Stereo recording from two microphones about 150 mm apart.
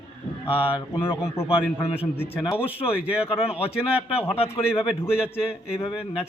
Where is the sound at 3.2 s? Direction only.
40° left (ahead or behind).